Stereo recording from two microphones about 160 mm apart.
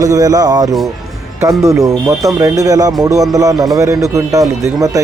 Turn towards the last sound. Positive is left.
turn(degrees=-20)  # may be behind; listen again after turning